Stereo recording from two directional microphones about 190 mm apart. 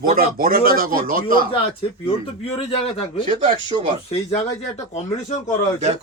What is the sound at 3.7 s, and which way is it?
Speech, 25° right (ahead or behind).